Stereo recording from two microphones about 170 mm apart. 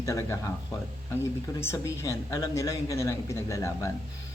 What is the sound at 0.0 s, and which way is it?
Speech, 15° left (ahead or behind).